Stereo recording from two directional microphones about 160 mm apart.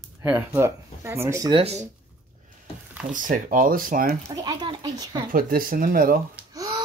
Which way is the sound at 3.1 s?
55° right (ahead or behind).